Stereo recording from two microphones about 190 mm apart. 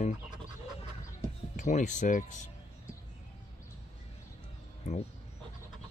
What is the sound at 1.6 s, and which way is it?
Speech, 40° left (ahead or behind).